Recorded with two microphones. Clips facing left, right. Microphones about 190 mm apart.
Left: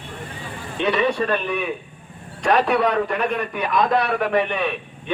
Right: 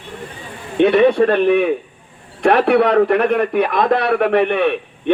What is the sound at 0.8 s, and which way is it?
A man's voice, 55° right (ahead or behind).